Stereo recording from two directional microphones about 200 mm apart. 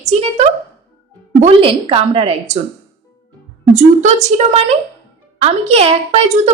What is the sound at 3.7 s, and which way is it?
A woman's voice, 35° right (ahead or behind).